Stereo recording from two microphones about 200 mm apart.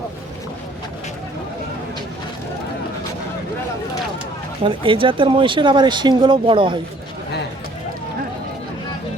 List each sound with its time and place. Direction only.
4.6 s speech: 25° right (ahead or behind)